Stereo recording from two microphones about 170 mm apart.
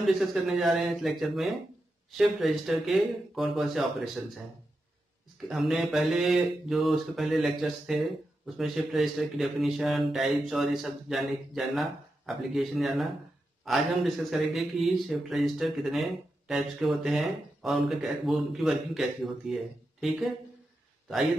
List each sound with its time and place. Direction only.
0.0 s speech: centre (ahead or behind)
5.5 s speech: centre (ahead or behind)